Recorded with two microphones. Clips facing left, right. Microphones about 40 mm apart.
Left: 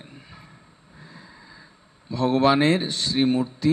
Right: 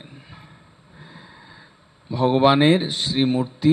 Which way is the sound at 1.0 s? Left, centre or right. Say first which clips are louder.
Right 2 dB; right.